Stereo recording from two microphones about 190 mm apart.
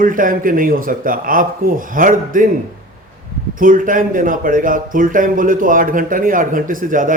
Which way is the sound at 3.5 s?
45° right (ahead or behind).